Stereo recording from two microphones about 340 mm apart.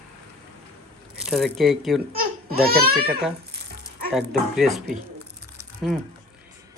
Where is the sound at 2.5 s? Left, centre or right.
Right.